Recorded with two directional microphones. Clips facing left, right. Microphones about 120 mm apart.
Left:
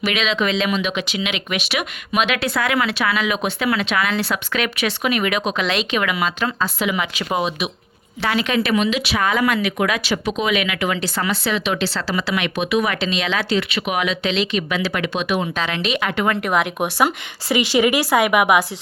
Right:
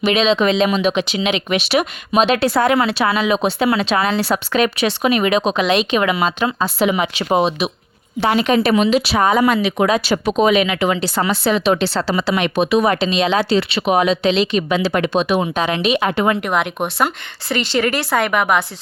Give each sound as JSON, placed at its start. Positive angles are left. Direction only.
{"t": 0.0, "sound": "speech", "side_deg": -30}
{"t": 11.9, "sound": "speech", "side_deg": -25}
{"t": 16.4, "sound": "speech", "side_deg": 0}